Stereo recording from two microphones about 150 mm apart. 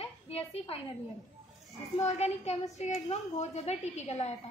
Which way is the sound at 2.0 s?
45° left (ahead or behind).